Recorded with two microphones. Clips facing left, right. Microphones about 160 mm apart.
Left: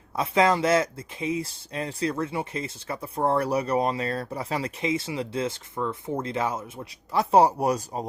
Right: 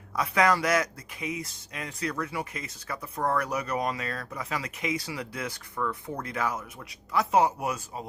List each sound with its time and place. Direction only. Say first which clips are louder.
0.2 s speech: left 3 dB; 25° left (ahead or behind)